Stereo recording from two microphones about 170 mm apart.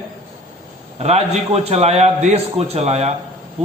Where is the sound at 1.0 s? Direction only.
40° right (ahead or behind).